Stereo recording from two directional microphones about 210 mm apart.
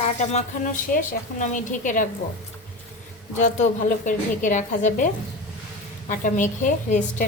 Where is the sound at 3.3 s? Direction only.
35° left (ahead or behind).